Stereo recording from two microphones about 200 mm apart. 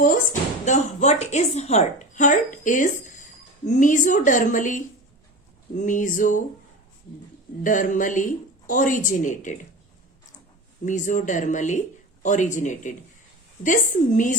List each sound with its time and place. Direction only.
0.6 s a woman's voice: 35° left (ahead or behind)
7.6 s a woman's voice: 40° left (ahead or behind)
10.8 s a woman's voice: 40° left (ahead or behind)